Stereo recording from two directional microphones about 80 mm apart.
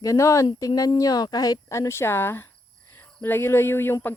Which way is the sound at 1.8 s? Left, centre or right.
Left.